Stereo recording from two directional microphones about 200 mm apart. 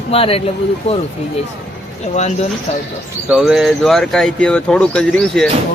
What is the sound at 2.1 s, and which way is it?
Speech, 35° left (ahead or behind).